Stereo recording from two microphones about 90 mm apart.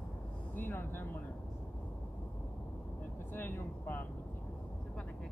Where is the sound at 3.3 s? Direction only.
25° left (ahead or behind).